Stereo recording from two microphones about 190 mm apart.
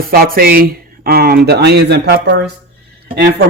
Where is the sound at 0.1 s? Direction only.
50° right (ahead or behind).